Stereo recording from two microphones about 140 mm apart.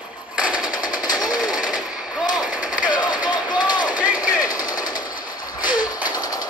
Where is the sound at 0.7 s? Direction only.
75° left (ahead or behind).